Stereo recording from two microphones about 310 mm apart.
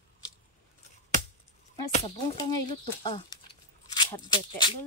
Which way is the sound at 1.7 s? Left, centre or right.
Centre.